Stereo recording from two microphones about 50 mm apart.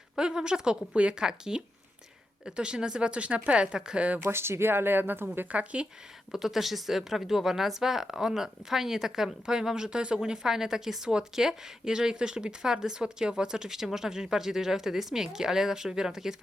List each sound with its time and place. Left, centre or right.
0.2 s a woman's voice: centre
4.2 s speech: right
5.5 s a woman's voice: right
6.3 s speech: centre